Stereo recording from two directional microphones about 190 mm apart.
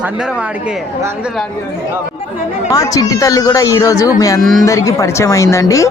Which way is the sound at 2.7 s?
20° left (ahead or behind).